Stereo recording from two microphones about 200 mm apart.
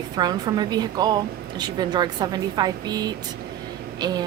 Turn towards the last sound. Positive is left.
turn(degrees=-20)  # may be behind; listen again after turning